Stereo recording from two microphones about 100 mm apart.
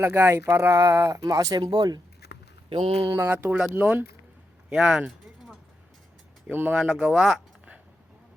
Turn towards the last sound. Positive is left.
turn(degrees=-5)  # may be behind; listen again after turning